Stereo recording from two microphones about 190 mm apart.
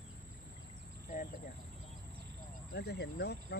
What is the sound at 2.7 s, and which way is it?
Speech, 60° left (ahead or behind).